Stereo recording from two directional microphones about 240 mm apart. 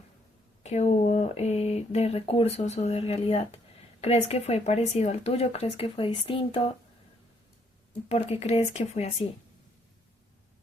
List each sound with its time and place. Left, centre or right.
0.6 s speech: left
8.1 s speech: left